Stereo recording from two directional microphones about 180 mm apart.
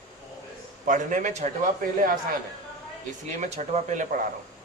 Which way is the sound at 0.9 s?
45° right (ahead or behind).